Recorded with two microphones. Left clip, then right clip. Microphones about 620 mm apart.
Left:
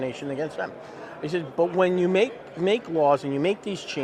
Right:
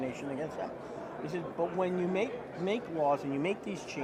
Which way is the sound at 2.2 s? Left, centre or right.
Left.